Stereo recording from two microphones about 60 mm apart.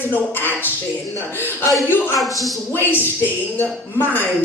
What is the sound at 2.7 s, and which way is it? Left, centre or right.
Speech, left.